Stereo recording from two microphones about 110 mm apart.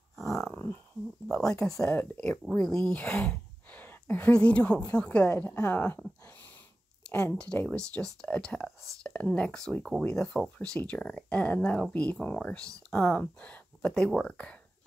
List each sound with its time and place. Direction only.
0.3 s a sound: 5° left (ahead or behind)
1.3 s speech: 5° left (ahead or behind)
1.9 s speech: 20° left (ahead or behind)
2.5 s speech: 5° left (ahead or behind)
7.1 s speech: 15° left (ahead or behind)